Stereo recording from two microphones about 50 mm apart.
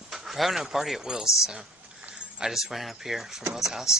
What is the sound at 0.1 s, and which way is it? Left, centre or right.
Speech, centre.